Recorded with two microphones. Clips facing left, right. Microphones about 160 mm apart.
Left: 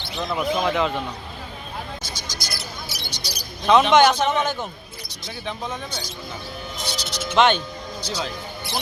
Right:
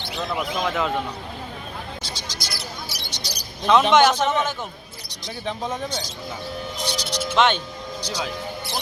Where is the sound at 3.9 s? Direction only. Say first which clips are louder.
Left 1 dB; centre (ahead or behind).